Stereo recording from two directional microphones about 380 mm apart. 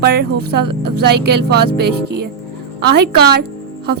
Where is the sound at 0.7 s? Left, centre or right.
Right.